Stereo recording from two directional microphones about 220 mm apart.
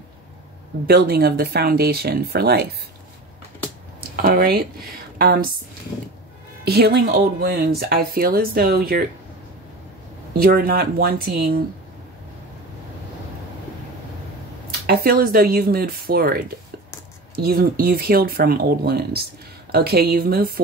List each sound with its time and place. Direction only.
0.8 s speech: 45° right (ahead or behind)
4.2 s speech: 45° right (ahead or behind)
6.6 s speech: 45° right (ahead or behind)
10.3 s speech: 45° right (ahead or behind)
14.9 s speech: 45° right (ahead or behind)